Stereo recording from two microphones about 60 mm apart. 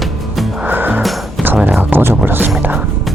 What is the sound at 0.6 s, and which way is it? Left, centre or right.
Music, right.